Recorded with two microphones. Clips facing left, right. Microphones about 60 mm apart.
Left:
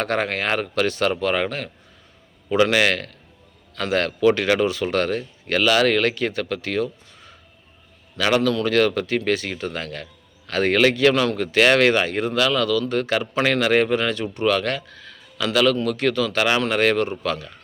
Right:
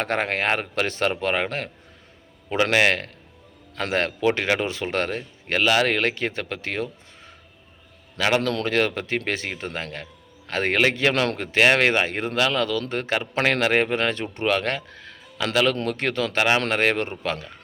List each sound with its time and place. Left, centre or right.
0.0 s speech: right
8.4 s speech: right
11.1 s speech: right
11.3 s speech: right